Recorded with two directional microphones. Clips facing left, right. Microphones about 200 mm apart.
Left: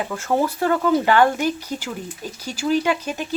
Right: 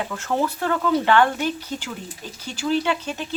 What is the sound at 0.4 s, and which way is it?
Speech, 10° left (ahead or behind).